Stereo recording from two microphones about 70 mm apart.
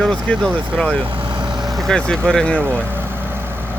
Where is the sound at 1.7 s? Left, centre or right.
Centre.